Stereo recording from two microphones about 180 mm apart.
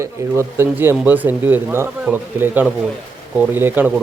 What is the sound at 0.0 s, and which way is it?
Speech, 15° right (ahead or behind).